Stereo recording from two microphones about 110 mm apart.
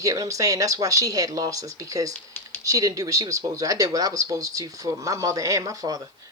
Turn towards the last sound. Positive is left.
turn(degrees=-30)  # may be behind; listen again after turning